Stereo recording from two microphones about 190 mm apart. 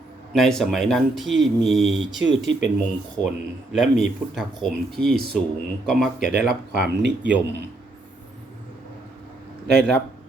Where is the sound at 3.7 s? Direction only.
Centre (ahead or behind).